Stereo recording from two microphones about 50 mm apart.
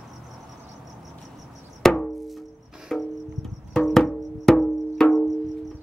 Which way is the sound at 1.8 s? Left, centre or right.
Centre.